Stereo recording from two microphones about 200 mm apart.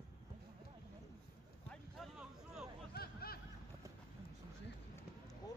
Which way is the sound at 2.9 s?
50° left (ahead or behind).